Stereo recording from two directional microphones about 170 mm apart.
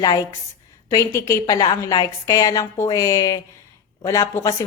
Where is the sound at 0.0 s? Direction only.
20° left (ahead or behind).